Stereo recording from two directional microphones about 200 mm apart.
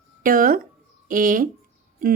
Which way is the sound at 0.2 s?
45° right (ahead or behind).